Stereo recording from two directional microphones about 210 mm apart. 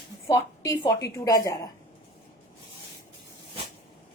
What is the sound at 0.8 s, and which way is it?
Speech, 15° left (ahead or behind).